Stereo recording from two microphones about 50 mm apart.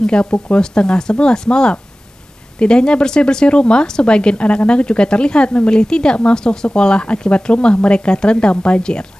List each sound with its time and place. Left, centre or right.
0.0 s a woman's voice: centre